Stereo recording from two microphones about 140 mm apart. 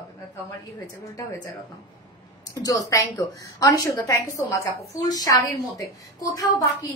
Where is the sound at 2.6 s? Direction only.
25° left (ahead or behind).